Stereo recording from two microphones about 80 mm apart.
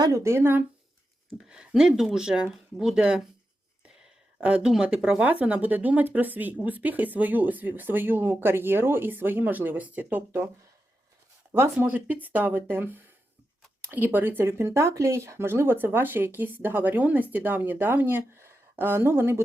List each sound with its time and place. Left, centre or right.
0.0 s speech: right
1.5 s speech: centre
4.4 s speech: centre
11.5 s speech: right